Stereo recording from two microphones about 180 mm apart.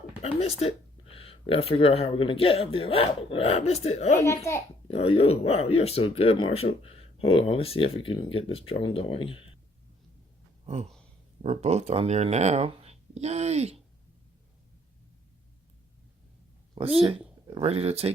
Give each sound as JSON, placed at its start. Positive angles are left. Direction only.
{"t": 0.2, "sound": "speech", "side_deg": 35}
{"t": 11.4, "sound": "speech", "side_deg": -40}
{"t": 16.8, "sound": "speech", "side_deg": -25}